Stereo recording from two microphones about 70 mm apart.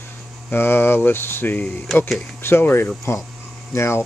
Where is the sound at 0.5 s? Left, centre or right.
Left.